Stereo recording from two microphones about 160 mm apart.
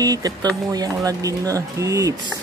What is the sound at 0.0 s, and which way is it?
Speech, 25° right (ahead or behind).